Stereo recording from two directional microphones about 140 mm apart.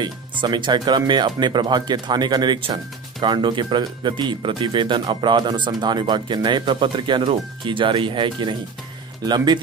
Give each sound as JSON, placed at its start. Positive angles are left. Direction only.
{"t": 0.0, "sound": "speech", "side_deg": -35}